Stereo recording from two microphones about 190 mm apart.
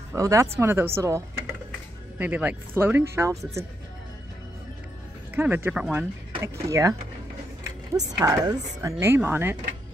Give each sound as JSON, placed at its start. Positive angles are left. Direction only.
{"t": 0.1, "sound": "speech", "side_deg": -15}
{"t": 5.3, "sound": "speech", "side_deg": -10}
{"t": 8.2, "sound": "speech", "side_deg": -15}